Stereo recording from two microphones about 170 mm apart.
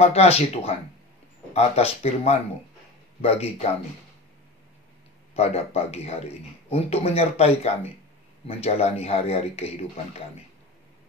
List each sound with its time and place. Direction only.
0.0 s a man's voice: 40° left (ahead or behind)
5.3 s a man's voice: 35° left (ahead or behind)